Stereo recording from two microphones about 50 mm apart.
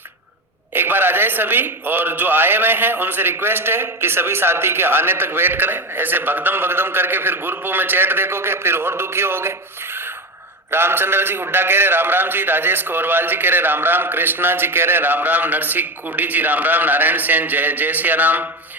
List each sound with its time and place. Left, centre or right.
0.7 s a man's voice: right